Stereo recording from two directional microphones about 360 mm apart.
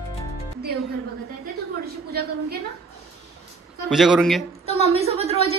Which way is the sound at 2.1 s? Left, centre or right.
Right.